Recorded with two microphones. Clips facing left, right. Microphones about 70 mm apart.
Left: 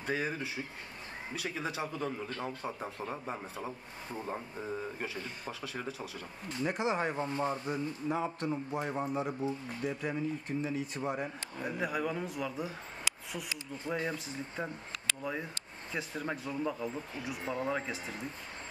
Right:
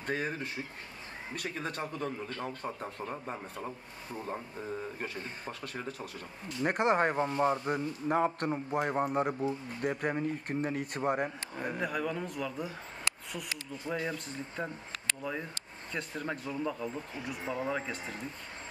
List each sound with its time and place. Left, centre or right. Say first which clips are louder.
0.0 s a man's voice: even; centre
6.6 s a man's voice: right 5 dB; right
11.7 s a man's voice: even; centre